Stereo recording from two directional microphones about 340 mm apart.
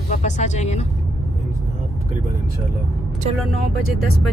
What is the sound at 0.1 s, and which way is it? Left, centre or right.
Speech, centre.